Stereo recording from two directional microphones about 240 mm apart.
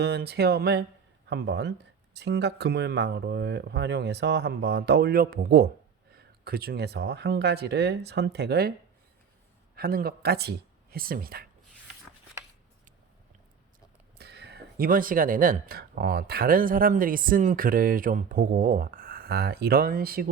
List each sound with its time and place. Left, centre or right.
0.0 s speech: right
9.7 s speech: right
14.2 s speech: right